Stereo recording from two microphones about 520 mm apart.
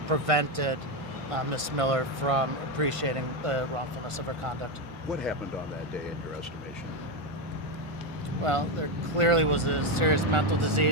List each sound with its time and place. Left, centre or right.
0.1 s speech: right
9.1 s speech: right